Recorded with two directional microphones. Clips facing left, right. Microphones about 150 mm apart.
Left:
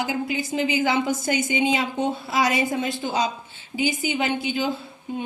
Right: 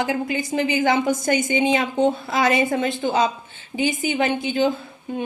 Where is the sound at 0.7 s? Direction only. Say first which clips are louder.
Right 4 dB; 50° right (ahead or behind).